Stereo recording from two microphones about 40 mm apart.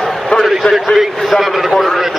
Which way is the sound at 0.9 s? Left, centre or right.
Centre.